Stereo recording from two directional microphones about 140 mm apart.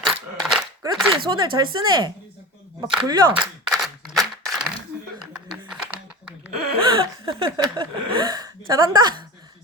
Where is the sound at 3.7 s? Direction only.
Centre (ahead or behind).